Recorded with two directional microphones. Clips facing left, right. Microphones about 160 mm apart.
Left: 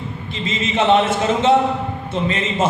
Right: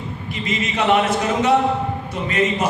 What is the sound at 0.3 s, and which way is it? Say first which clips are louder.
A man's voice: left 2 dB; 25° left (ahead or behind).